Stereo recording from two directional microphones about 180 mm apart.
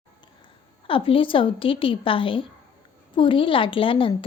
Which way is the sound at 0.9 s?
30° left (ahead or behind).